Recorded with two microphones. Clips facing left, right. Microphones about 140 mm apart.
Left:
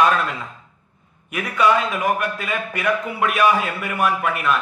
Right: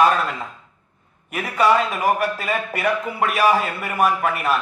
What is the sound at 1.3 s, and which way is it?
A man's voice, 35° right (ahead or behind).